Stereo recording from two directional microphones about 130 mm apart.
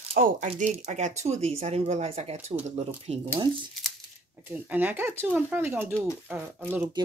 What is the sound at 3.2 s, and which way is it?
Speech, 40° right (ahead or behind).